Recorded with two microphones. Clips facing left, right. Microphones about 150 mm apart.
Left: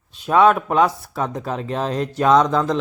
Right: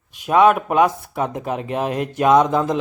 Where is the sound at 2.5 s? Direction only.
20° right (ahead or behind).